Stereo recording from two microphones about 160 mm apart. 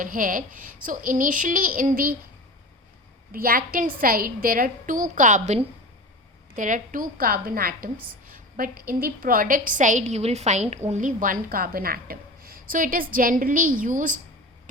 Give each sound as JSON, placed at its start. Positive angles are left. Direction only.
{"t": 0.0, "sound": "a woman's voice", "side_deg": -55}
{"t": 3.3, "sound": "a woman's voice", "side_deg": -65}
{"t": 6.6, "sound": "a woman's voice", "side_deg": -55}